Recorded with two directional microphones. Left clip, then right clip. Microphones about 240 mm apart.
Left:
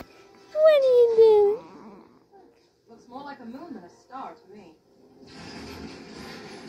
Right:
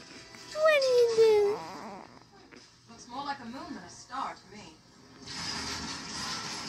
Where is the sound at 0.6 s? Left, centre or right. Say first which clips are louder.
Left 7 dB; centre.